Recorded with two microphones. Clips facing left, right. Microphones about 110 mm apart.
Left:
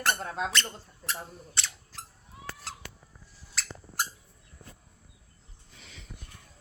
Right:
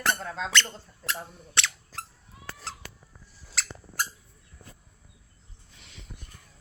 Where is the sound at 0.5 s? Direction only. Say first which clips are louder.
Right 4 dB; 90° right.